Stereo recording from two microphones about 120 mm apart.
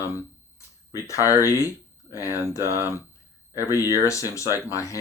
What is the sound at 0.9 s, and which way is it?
Speech, 25° left (ahead or behind).